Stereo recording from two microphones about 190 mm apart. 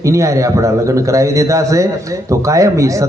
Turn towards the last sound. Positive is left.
turn(degrees=-15)  # may be behind; listen again after turning